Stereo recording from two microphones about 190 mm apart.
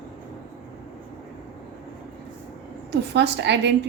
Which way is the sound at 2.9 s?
60° right (ahead or behind).